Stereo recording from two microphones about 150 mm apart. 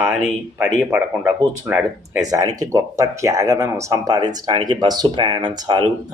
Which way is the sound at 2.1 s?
25° right (ahead or behind).